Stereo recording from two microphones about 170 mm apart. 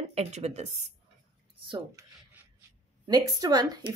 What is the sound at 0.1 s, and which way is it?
Speech, 40° right (ahead or behind).